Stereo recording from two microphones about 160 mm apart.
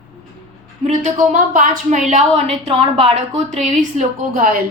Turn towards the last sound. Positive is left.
turn(degrees=-60)  # may be behind; listen again after turning